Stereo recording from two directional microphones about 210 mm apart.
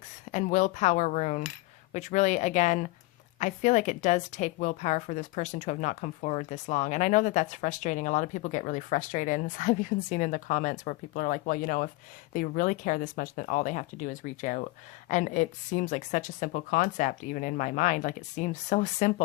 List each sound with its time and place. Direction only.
0.3 s a woman's voice: 35° left (ahead or behind)